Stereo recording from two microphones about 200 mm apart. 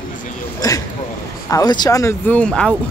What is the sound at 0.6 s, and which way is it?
Speech, 20° left (ahead or behind).